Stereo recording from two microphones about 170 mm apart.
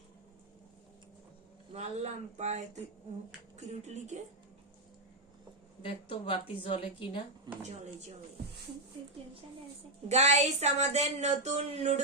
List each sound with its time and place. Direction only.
1.7 s speech: 40° right (ahead or behind)
5.8 s a woman's voice: 30° left (ahead or behind)
7.5 s speech: 25° right (ahead or behind)
10.1 s speech: 40° right (ahead or behind)